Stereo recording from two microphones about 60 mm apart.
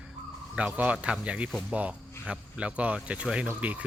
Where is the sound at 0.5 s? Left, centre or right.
Right.